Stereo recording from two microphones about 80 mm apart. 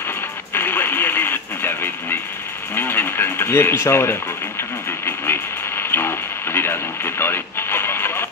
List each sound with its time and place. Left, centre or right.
0.6 s radio: left
2.7 s a sound: left
5.0 s radio: left